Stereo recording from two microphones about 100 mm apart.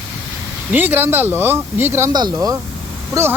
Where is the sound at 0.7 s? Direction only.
20° right (ahead or behind).